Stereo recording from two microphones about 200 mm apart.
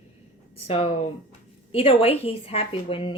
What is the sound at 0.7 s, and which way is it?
Speech, 30° left (ahead or behind).